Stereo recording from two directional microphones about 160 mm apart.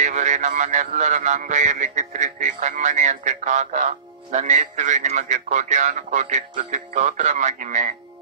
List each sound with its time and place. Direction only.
0.0 s a man's voice: 50° right (ahead or behind)